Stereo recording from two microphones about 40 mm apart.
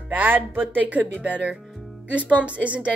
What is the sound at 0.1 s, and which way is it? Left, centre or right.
Speech, right.